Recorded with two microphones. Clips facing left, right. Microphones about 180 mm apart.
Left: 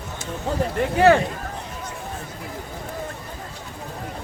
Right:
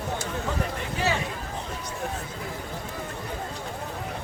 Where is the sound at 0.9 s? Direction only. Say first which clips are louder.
Left 13 dB; 60° left (ahead or behind).